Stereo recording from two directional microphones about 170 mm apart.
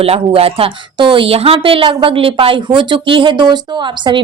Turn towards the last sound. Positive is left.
turn(degrees=-25)  # may be behind; listen again after turning